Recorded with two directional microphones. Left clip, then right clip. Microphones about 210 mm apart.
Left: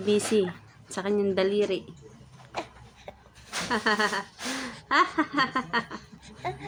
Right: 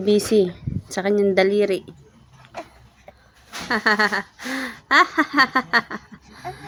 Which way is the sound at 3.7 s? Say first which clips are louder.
Right 7 dB; 45° right (ahead or behind).